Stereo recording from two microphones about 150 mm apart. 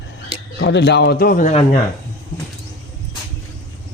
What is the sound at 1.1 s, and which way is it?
Speech, 85° left.